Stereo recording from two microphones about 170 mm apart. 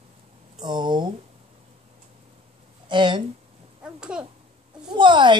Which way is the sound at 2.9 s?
30° right (ahead or behind).